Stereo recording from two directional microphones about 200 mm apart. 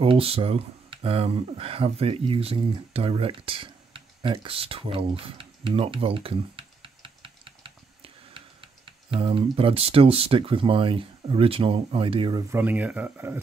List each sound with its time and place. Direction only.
0.0 s speech: 30° right (ahead or behind); by 13.4 s 10° right (ahead or behind)